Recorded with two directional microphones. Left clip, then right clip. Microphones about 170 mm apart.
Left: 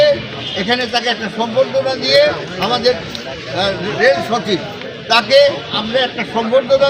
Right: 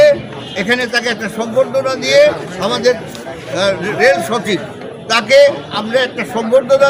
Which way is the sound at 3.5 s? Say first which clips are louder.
Right 3 dB; 20° right (ahead or behind).